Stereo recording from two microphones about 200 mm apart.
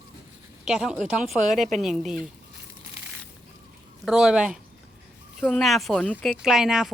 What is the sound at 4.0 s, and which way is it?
A woman's voice, 5° right (ahead or behind).